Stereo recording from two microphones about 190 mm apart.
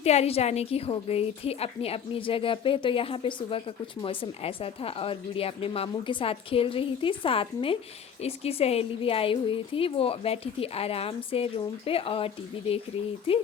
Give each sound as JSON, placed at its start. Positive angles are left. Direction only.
{"t": 0.0, "sound": "a woman's voice", "side_deg": 35}